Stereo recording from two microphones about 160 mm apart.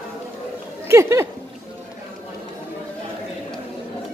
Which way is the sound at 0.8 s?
15° right (ahead or behind).